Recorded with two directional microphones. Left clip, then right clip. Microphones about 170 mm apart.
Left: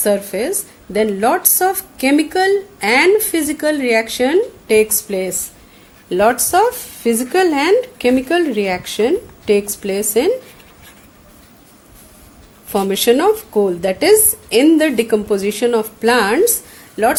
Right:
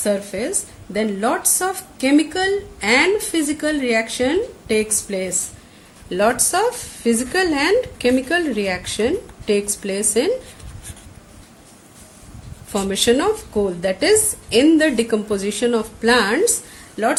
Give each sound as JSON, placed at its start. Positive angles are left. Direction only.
{"t": 0.0, "sound": "a woman's voice", "side_deg": 50}
{"t": 12.7, "sound": "a woman's voice", "side_deg": 40}